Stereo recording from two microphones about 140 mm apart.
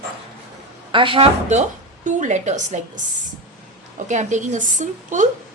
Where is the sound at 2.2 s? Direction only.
55° right (ahead or behind).